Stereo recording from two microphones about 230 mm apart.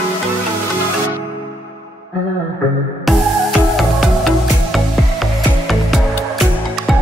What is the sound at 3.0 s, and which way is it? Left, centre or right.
Music, centre.